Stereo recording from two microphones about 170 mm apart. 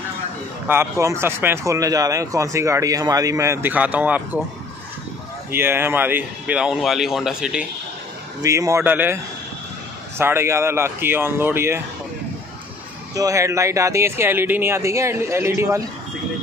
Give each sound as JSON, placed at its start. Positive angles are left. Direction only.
{"t": 0.7, "sound": "speech", "side_deg": -15}
{"t": 5.5, "sound": "speech", "side_deg": -15}
{"t": 8.4, "sound": "speech", "side_deg": -20}
{"t": 13.1, "sound": "speech", "side_deg": -20}